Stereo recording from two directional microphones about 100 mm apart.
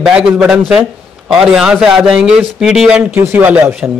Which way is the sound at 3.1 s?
20° right (ahead or behind).